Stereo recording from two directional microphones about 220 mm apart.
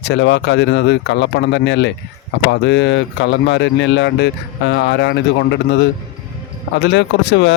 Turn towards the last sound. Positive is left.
turn(degrees=50)  # may be behind; listen again after turning